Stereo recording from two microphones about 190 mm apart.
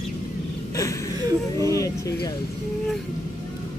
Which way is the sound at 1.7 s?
15° left (ahead or behind).